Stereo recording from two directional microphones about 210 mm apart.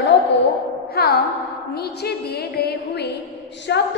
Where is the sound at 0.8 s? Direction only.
50° left (ahead or behind).